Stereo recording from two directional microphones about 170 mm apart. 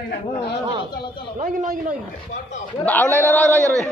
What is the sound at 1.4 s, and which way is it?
Speech, 50° right (ahead or behind).